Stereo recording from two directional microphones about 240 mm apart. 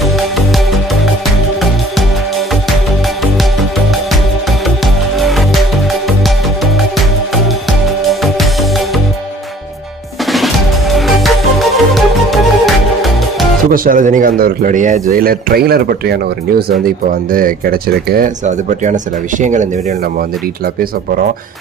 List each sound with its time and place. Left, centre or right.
5.2 s music: centre
8.1 s music: centre
10.3 s music: centre
13.7 s speech: right